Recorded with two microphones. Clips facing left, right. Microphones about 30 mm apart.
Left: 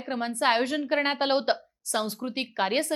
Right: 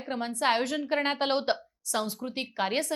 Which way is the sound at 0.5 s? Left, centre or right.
Left.